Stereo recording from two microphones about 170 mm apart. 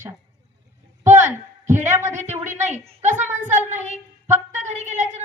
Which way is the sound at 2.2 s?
45° right (ahead or behind).